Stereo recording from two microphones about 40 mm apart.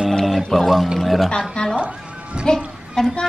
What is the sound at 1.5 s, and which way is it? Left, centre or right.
A woman's voice, centre.